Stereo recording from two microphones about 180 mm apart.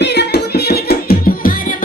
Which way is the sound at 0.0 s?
70° left (ahead or behind).